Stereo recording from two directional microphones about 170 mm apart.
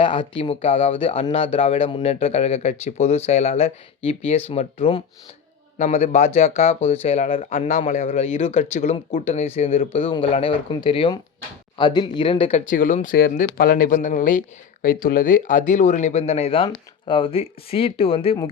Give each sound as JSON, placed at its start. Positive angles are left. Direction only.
{"t": 0.0, "sound": "speech", "side_deg": 30}